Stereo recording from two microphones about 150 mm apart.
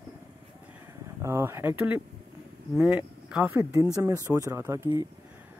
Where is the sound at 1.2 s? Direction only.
15° right (ahead or behind).